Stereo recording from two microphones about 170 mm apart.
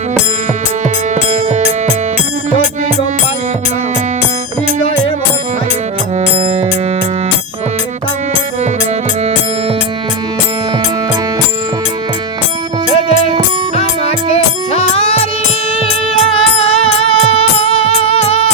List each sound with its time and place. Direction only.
1.1 s music: 40° right (ahead or behind)
14.3 s music: 35° left (ahead or behind)